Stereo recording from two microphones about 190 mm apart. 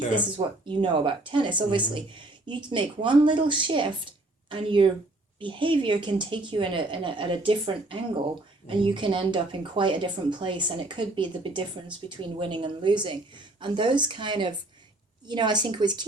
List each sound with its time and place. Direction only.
0.3 s speech: 25° right (ahead or behind)